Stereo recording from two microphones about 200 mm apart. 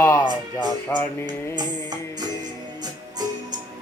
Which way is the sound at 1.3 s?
20° right (ahead or behind).